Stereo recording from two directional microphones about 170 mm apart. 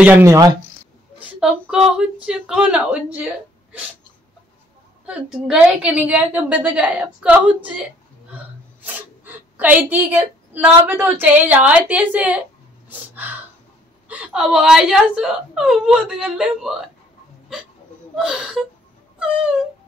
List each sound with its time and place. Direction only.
0.0 s a woman's voice: 15° right (ahead or behind)
1.2 s speech: 5° right (ahead or behind)
5.0 s a woman's voice: 5° right (ahead or behind)
8.8 s a woman's voice: 10° right (ahead or behind)
14.0 s speech: 10° right (ahead or behind)
18.1 s speech: 5° right (ahead or behind)